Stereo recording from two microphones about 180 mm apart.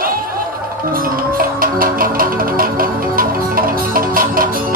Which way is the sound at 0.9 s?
50° right (ahead or behind).